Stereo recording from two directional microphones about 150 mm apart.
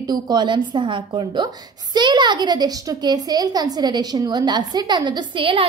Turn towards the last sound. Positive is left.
turn(degrees=-35)  # may be behind; listen again after turning